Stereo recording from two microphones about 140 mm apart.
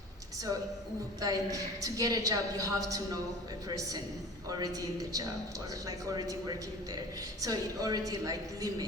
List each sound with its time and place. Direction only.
1.2 s a woman's voice: 25° right (ahead or behind)
7.4 s a woman's voice: 25° right (ahead or behind)